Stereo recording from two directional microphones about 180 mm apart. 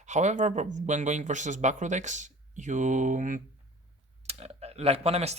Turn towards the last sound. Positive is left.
turn(degrees=-35)  # may be behind; listen again after turning